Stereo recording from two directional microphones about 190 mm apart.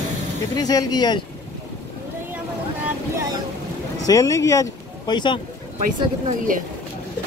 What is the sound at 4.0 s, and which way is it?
Speech, 15° left (ahead or behind).